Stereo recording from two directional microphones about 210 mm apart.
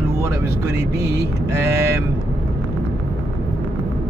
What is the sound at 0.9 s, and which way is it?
Vehicle, 10° right (ahead or behind).